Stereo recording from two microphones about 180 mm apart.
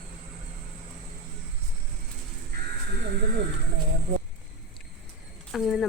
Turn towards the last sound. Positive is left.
turn(degrees=0)  # may be behind; listen again after turning